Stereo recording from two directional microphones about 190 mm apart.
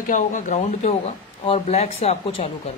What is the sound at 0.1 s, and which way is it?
Speech, 40° left (ahead or behind).